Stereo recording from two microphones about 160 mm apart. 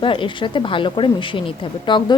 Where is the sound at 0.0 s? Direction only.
30° left (ahead or behind).